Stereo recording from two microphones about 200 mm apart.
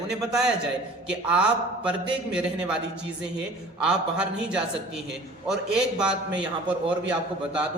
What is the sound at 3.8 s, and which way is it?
A man's voice, 5° right (ahead or behind).